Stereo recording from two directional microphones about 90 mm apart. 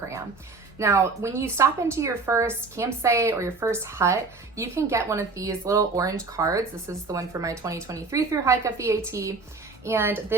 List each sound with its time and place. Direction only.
0.8 s a woman's voice: 30° right (ahead or behind)